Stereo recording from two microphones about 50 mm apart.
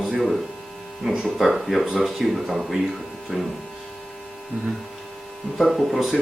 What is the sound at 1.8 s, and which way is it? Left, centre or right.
Speech, centre.